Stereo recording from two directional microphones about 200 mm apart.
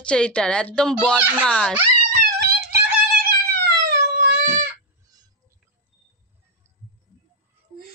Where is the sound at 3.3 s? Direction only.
50° right (ahead or behind).